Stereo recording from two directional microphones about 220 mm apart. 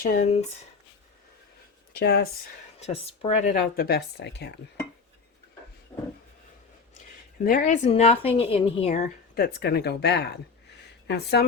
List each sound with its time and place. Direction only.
0.0 s speech: 35° left (ahead or behind)
1.9 s speech: 45° left (ahead or behind)
2.8 s speech: 30° left (ahead or behind); by 4.5 s 50° left (ahead or behind)
5.9 s a sound: 5° left (ahead or behind)
7.4 s a woman's voice: 40° left (ahead or behind)
9.0 s speech: 45° left (ahead or behind)